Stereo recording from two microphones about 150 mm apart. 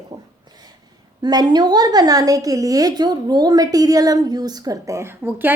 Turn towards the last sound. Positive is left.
turn(degrees=-15)  # may be behind; listen again after turning